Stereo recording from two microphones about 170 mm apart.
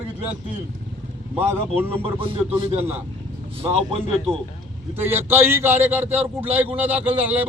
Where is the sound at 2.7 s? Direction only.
40° right (ahead or behind).